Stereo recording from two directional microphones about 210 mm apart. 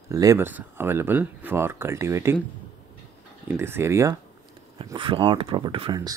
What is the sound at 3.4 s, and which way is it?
Speech, 10° right (ahead or behind).